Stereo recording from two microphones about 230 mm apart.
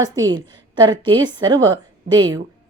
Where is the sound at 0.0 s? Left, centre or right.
Centre.